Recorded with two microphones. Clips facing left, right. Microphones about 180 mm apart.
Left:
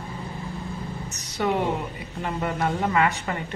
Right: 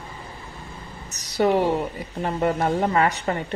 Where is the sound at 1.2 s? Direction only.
35° right (ahead or behind).